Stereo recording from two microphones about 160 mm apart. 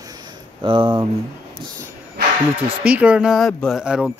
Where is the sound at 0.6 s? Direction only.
30° right (ahead or behind).